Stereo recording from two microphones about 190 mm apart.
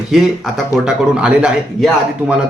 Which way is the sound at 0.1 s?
5° right (ahead or behind).